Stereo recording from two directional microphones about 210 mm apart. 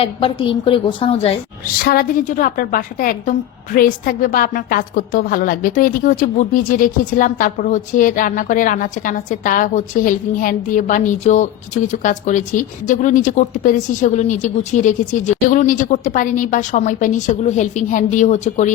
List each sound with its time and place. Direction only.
0.0 s a woman's voice: 25° left (ahead or behind)
1.8 s a woman's voice: 45° left (ahead or behind)